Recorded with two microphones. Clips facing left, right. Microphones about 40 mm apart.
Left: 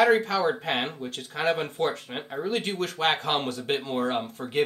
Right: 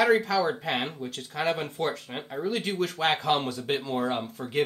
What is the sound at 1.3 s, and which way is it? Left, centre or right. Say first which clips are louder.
Speech: left 2 dB; centre.